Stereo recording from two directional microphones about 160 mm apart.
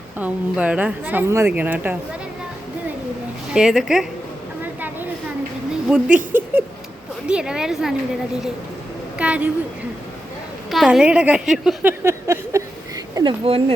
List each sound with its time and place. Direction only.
0.2 s a woman's voice: 10° right (ahead or behind)
3.5 s a woman's voice: 5° right (ahead or behind)
4.6 s a sound: 10° right (ahead or behind)
5.9 s a woman's voice: 10° right (ahead or behind)
9.1 s a woman's voice: 10° right (ahead or behind)
10.7 s a woman's voice: centre (ahead or behind); by 12.6 s 20° right (ahead or behind)
13.1 s speech: 35° right (ahead or behind)